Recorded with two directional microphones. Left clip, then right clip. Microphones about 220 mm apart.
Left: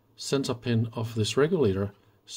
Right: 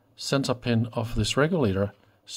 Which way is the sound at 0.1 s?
20° right (ahead or behind).